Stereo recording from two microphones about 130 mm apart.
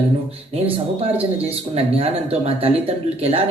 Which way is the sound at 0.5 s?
50° right (ahead or behind).